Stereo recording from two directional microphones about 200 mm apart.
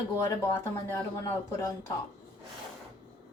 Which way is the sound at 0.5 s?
10° left (ahead or behind).